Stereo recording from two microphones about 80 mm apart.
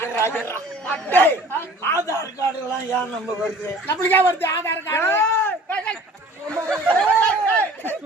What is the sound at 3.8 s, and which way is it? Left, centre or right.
Speech, left.